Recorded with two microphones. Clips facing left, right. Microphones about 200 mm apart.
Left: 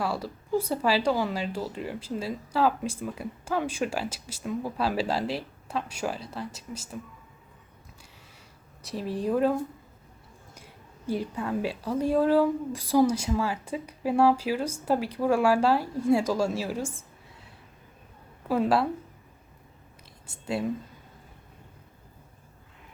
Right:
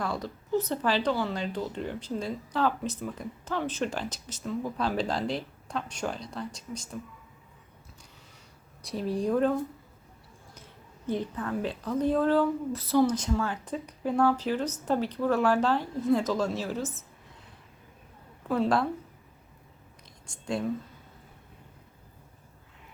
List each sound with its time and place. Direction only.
0.0 s speech: 10° left (ahead or behind)
8.8 s speech: 5° left (ahead or behind)
18.4 s speech: 10° left (ahead or behind)
20.2 s speech: 5° left (ahead or behind)